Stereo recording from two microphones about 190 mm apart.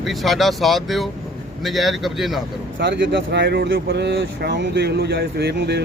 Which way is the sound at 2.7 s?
70° right (ahead or behind).